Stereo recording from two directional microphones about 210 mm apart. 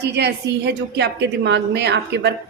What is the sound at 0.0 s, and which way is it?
A woman's voice, 55° right (ahead or behind).